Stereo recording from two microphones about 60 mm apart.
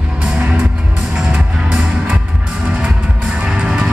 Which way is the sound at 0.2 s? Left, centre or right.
Right.